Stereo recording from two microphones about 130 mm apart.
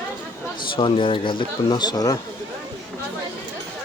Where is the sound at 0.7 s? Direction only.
45° left (ahead or behind).